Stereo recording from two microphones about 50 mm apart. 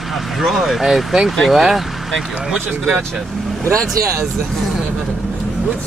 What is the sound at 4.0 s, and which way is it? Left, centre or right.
Speech, right.